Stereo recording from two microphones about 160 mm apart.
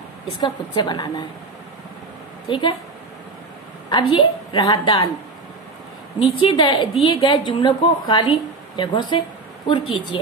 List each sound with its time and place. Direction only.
0.4 s a woman's voice: 25° left (ahead or behind)
3.9 s a woman's voice: 30° left (ahead or behind)
6.1 s a woman's voice: 35° left (ahead or behind)